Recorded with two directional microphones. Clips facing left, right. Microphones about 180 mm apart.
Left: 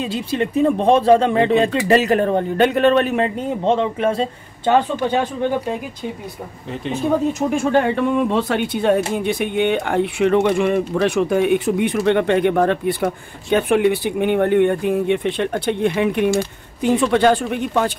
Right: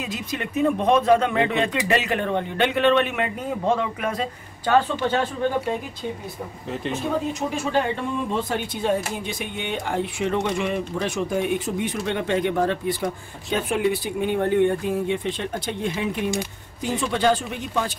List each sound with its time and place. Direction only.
0.0 s a man's voice: 30° left (ahead or behind)
7.3 s speech: 55° left (ahead or behind)